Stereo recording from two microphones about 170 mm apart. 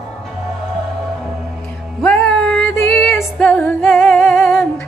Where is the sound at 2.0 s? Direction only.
5° left (ahead or behind).